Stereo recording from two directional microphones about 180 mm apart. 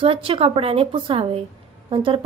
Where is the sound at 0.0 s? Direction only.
30° right (ahead or behind).